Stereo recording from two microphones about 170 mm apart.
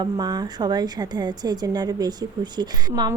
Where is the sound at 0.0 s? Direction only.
25° right (ahead or behind).